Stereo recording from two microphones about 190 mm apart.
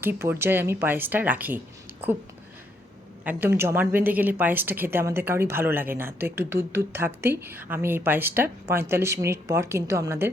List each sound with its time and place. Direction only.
0.0 s a woman's voice: 10° right (ahead or behind)
3.2 s a woman's voice: 10° right (ahead or behind)